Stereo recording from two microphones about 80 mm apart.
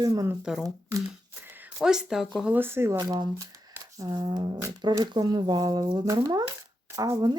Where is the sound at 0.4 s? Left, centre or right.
Centre.